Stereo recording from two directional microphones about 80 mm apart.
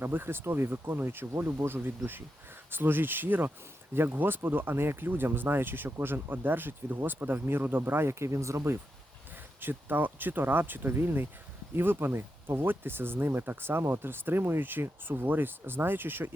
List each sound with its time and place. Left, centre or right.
0.0 s speech: right
9.6 s speech: right